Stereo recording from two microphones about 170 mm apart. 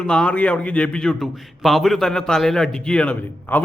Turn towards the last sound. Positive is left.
turn(degrees=10)  # may be behind; listen again after turning